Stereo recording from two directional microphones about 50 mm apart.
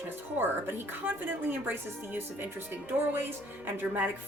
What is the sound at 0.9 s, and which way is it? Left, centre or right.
Speech, right.